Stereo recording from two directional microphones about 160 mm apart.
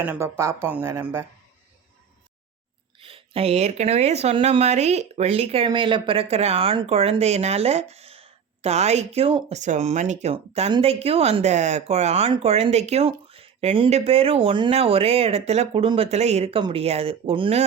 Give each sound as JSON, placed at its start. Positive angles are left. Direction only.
{"t": 0.0, "sound": "speech", "side_deg": -15}
{"t": 3.0, "sound": "speech", "side_deg": -35}
{"t": 10.3, "sound": "speech", "side_deg": -35}